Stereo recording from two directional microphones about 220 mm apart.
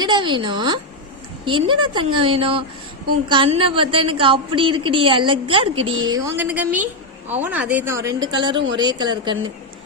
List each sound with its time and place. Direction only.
0.0 s a woman's voice: 20° right (ahead or behind)